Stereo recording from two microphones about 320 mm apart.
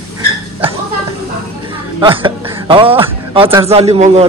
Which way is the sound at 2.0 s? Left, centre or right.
Centre.